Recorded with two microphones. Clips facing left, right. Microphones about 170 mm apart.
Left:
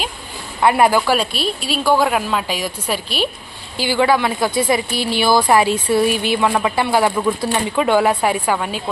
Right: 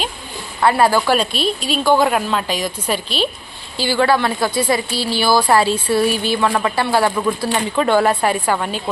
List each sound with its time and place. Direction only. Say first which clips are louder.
0.6 s a woman's voice: even; 15° left (ahead or behind)